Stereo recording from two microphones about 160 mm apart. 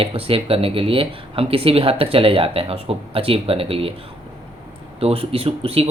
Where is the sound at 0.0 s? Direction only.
35° right (ahead or behind).